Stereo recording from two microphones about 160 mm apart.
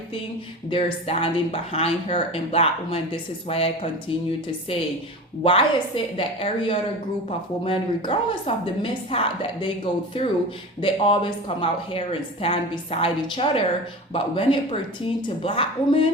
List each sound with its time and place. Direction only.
0.7 s a woman's voice: 35° left (ahead or behind)
5.4 s a woman's voice: 35° left (ahead or behind)